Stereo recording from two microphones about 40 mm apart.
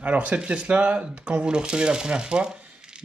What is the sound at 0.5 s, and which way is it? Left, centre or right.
Speech, right.